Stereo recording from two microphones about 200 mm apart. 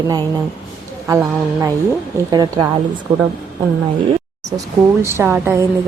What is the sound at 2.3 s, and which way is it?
Speech, 20° right (ahead or behind).